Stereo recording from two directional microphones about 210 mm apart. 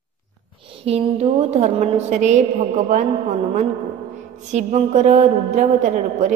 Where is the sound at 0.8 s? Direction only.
30° right (ahead or behind).